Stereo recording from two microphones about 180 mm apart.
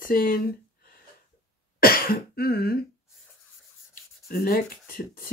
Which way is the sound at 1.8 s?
55° left (ahead or behind).